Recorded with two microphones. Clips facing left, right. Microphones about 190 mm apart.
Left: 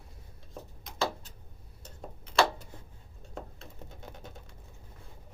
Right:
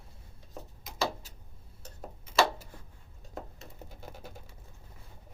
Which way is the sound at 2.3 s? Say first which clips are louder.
Even; 5° right (ahead or behind).